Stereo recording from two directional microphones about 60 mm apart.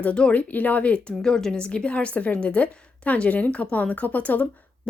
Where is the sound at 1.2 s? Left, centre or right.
Centre.